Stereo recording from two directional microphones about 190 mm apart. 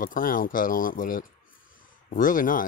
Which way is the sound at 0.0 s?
45° left (ahead or behind).